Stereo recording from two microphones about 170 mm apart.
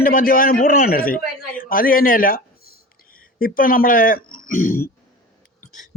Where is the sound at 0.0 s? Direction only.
55° left (ahead or behind).